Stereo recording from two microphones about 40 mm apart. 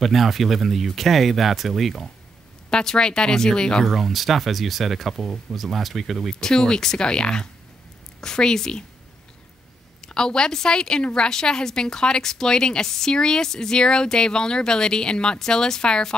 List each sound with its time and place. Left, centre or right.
0.0 s speech: centre
2.7 s a woman's voice: centre
3.8 s speech: centre
6.4 s a woman's voice: centre
10.0 s a woman's voice: centre